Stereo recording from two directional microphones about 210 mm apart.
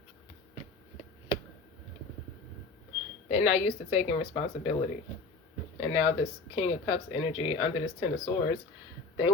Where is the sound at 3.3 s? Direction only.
30° left (ahead or behind).